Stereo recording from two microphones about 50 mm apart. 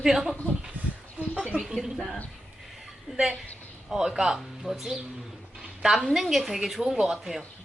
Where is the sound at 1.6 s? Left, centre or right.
Centre.